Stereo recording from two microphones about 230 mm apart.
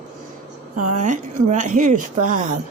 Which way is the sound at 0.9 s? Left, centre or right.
Right.